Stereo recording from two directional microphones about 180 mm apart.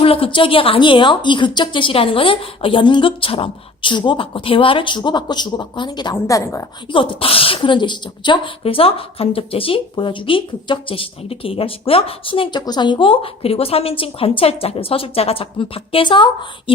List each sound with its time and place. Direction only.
0.0 s a woman's voice: 30° left (ahead or behind)
6.9 s a woman's voice: 30° left (ahead or behind)